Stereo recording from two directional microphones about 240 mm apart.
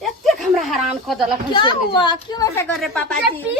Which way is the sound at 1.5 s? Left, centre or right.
Centre.